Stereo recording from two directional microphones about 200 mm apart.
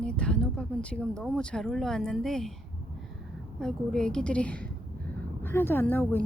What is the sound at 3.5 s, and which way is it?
Speech, 5° left (ahead or behind).